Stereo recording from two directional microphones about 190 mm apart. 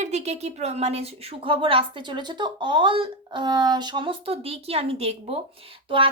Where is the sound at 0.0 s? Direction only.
35° right (ahead or behind).